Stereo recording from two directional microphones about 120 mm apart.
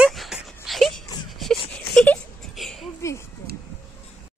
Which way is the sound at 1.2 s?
Centre (ahead or behind).